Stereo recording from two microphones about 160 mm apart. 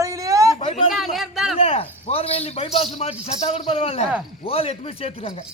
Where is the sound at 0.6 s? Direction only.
40° left (ahead or behind).